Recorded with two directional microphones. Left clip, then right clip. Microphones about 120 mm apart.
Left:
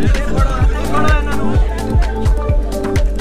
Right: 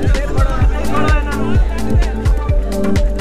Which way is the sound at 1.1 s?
35° left (ahead or behind).